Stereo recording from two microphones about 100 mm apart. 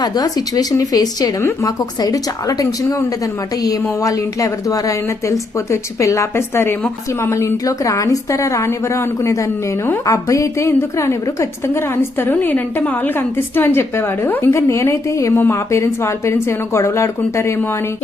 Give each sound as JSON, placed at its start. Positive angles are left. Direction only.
{"t": 0.0, "sound": "a woman's voice", "side_deg": 40}
{"t": 4.0, "sound": "a woman's voice", "side_deg": 35}